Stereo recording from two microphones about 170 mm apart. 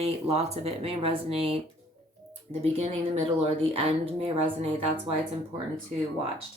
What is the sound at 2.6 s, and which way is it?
Speech, 35° right (ahead or behind).